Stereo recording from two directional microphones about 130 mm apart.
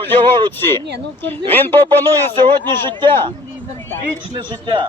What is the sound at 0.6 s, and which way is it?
Speech, 15° left (ahead or behind).